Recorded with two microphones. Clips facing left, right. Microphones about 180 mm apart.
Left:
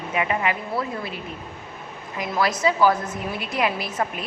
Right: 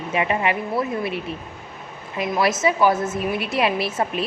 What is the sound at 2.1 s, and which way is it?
A woman's voice, 25° right (ahead or behind).